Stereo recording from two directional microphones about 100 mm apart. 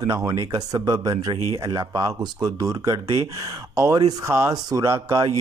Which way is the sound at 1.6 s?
30° right (ahead or behind).